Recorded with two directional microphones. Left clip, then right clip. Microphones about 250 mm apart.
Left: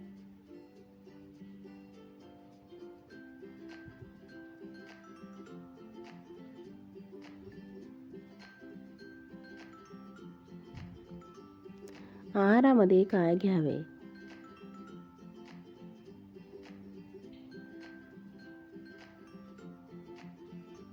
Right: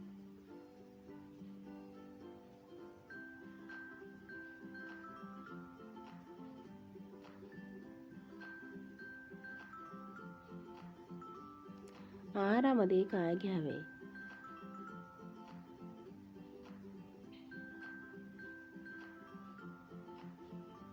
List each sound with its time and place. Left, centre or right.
12.3 s a woman's voice: centre